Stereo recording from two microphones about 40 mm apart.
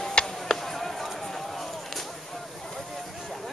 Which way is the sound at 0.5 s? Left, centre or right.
Centre.